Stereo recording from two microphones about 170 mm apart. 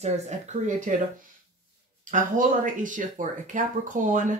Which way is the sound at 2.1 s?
50° right (ahead or behind).